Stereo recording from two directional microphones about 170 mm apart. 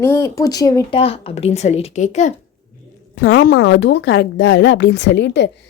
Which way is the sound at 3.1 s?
60° left (ahead or behind).